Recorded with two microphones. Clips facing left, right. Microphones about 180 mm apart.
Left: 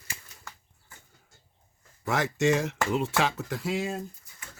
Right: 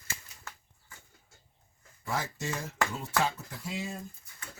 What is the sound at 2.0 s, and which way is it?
Speech, 80° left.